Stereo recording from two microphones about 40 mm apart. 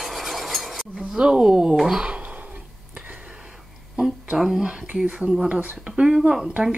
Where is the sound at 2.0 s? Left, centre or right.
Right.